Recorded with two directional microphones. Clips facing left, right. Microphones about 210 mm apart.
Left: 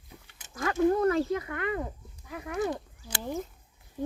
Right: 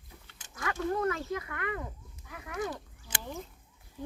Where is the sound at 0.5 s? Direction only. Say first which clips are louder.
Left 7 dB; 35° left (ahead or behind).